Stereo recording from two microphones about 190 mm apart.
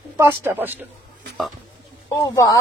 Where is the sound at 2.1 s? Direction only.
15° left (ahead or behind).